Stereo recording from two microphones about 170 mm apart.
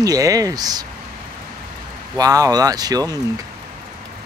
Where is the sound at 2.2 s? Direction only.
20° right (ahead or behind).